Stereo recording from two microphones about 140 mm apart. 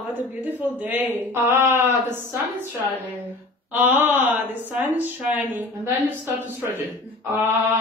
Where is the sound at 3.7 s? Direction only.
15° right (ahead or behind).